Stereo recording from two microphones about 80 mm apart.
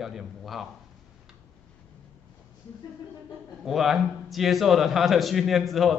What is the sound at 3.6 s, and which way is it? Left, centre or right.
A man's voice, centre.